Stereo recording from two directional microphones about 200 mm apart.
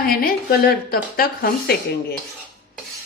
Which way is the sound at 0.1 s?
50° left (ahead or behind).